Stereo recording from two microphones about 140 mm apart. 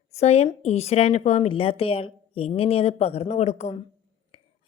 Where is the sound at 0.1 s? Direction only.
50° left (ahead or behind).